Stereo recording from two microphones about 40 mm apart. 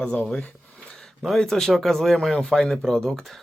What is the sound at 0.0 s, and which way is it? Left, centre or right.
Speech, left.